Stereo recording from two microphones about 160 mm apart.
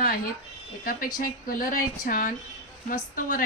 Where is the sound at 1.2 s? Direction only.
60° left (ahead or behind).